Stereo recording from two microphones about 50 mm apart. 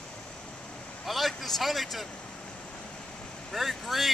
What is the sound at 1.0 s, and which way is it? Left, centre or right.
A man's voice, centre.